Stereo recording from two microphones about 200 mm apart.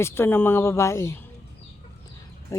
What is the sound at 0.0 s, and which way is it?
Speech, 10° left (ahead or behind).